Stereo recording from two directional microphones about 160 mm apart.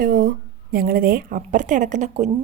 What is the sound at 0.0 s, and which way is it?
A woman's voice, 60° right (ahead or behind).